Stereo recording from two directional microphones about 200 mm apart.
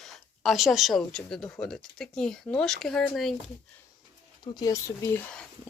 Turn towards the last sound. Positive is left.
turn(degrees=5)  # may be behind; listen again after turning